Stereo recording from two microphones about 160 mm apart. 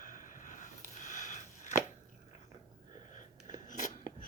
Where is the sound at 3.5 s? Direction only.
50° left (ahead or behind).